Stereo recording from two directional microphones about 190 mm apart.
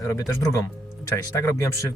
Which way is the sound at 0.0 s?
15° left (ahead or behind).